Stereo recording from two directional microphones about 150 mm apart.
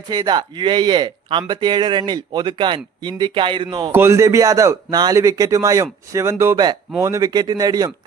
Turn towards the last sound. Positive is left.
turn(degrees=-25)  # may be behind; listen again after turning